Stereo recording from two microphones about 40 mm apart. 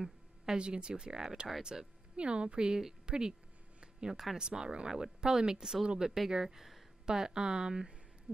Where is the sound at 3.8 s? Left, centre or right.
Centre.